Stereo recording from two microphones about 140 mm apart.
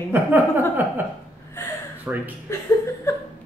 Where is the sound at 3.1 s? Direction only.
20° left (ahead or behind).